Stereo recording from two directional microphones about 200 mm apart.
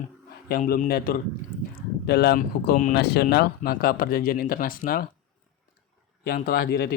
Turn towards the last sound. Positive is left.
turn(degrees=50)  # may be behind; listen again after turning